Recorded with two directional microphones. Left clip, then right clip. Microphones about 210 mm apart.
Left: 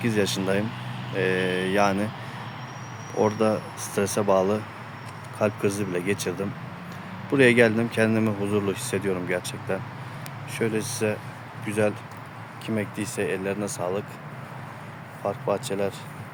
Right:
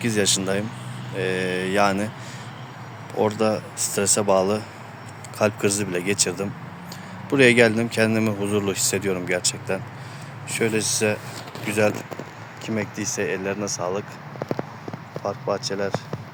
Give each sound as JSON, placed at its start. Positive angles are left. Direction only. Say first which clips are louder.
{"t": 0.0, "sound": "speech", "louder": "right 3 dB", "side_deg": 0}
{"t": 3.2, "sound": "speech", "louder": "right 1 dB", "side_deg": 5}
{"t": 15.2, "sound": "speech", "louder": "right 1 dB", "side_deg": 5}